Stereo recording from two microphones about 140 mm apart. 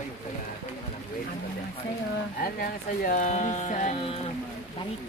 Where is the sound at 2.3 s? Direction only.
90° left; by 4.1 s 55° left (ahead or behind).